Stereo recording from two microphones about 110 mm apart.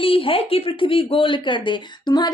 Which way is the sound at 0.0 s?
55° left (ahead or behind).